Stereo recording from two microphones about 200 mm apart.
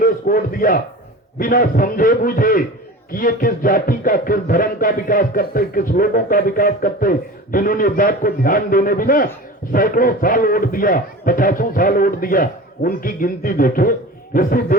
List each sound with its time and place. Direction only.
0.0 s a man's voice: 45° left (ahead or behind)